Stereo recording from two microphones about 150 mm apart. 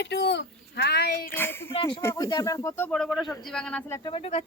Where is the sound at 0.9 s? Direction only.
90° left.